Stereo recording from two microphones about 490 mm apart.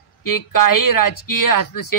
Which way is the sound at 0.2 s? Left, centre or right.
Left.